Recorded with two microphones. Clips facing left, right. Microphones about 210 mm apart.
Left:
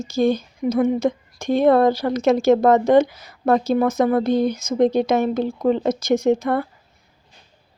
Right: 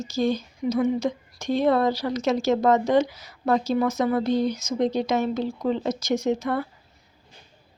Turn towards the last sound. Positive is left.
turn(degrees=55)  # may be behind; listen again after turning